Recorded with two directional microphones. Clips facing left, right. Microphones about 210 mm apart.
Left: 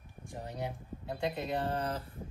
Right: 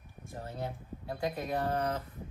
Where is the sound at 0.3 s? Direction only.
15° left (ahead or behind).